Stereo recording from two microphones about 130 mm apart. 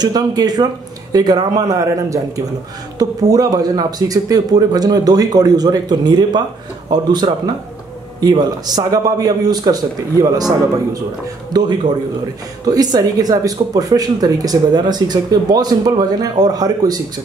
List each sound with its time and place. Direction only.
0.0 s speech: 30° right (ahead or behind)
11.5 s speech: 30° right (ahead or behind)